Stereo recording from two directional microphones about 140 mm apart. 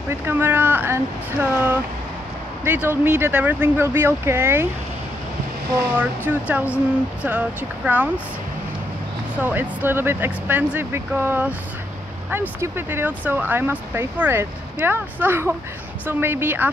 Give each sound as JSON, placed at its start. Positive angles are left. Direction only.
{"t": 0.1, "sound": "speech", "side_deg": -15}
{"t": 5.9, "sound": "speech", "side_deg": -10}
{"t": 9.4, "sound": "speech", "side_deg": -15}